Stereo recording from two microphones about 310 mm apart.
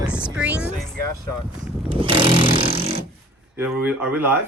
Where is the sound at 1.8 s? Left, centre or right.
Centre.